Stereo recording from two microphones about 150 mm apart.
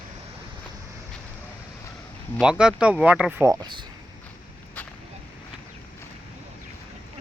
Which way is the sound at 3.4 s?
25° right (ahead or behind).